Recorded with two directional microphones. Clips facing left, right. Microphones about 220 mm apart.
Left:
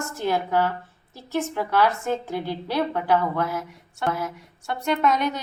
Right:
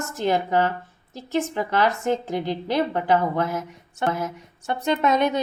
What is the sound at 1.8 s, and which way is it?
A woman's voice, 20° right (ahead or behind).